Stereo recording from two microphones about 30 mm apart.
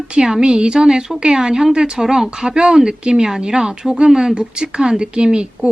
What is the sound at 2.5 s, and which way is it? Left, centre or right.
A woman's voice, right.